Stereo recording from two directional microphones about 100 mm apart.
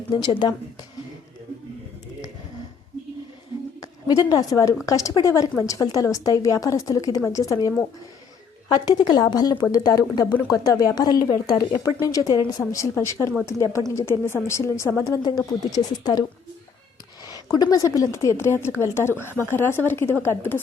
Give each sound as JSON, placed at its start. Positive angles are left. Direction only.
{"t": 0.1, "sound": "speech", "side_deg": 50}
{"t": 3.8, "sound": "a woman's voice", "side_deg": 40}
{"t": 8.7, "sound": "a woman's voice", "side_deg": 45}
{"t": 15.2, "sound": "speech", "side_deg": 40}
{"t": 17.2, "sound": "a woman's voice", "side_deg": 40}